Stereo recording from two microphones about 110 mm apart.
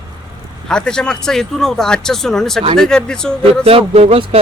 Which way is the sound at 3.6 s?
65° right (ahead or behind).